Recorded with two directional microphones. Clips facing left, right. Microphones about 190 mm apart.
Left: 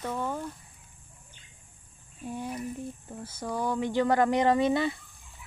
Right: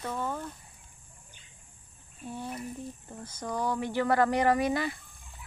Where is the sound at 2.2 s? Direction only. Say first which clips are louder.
Left 3 dB; 15° left (ahead or behind).